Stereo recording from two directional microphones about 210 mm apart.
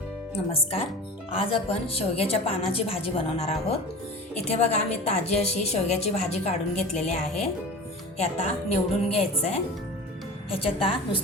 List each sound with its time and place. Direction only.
0.3 s a woman's voice: 25° left (ahead or behind)
4.5 s a woman's voice: 30° left (ahead or behind)